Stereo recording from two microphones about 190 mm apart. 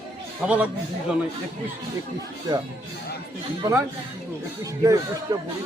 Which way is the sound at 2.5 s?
20° right (ahead or behind).